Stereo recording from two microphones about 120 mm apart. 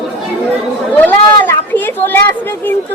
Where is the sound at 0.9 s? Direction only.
15° left (ahead or behind).